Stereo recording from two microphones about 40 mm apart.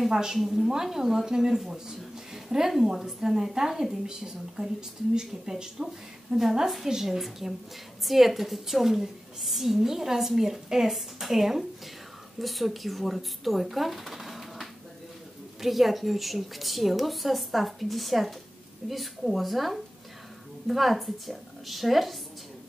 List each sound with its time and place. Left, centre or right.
0.1 s a woman's voice: centre